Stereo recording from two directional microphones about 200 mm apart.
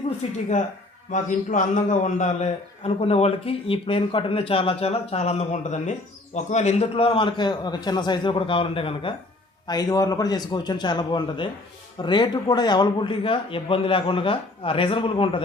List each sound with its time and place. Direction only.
0.2 s a man's voice: 25° left (ahead or behind)
1.1 s a man's voice: 40° left (ahead or behind)